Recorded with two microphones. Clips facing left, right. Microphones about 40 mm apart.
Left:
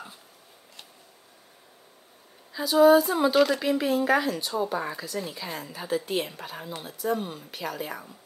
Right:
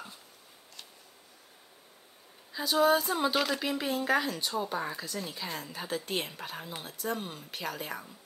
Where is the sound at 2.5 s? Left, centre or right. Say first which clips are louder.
Left 7 dB; centre.